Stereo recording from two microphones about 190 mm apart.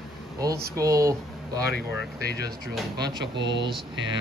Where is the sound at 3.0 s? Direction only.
20° right (ahead or behind).